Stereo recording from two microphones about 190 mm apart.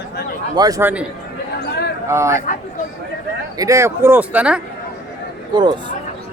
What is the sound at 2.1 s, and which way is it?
Speech, 15° right (ahead or behind).